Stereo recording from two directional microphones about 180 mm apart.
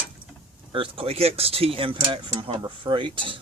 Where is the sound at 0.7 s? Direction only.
30° right (ahead or behind).